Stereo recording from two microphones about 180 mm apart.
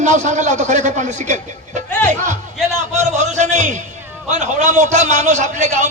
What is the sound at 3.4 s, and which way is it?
A man's voice, 40° right (ahead or behind).